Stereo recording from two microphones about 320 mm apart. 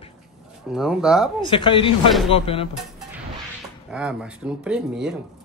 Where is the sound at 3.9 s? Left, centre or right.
Centre.